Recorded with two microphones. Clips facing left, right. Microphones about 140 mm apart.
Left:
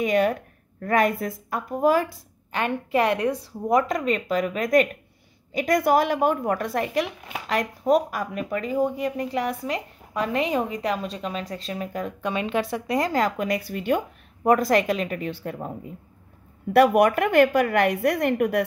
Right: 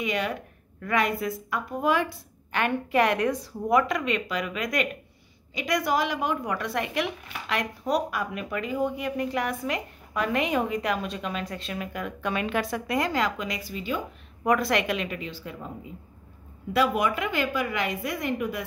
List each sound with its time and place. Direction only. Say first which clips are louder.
0.0 s a woman's voice: left 7 dB; 45° left (ahead or behind)
14.5 s a woman's voice: left 4 dB; 40° left (ahead or behind)
16.7 s a woman's voice: left 7 dB; 65° left (ahead or behind)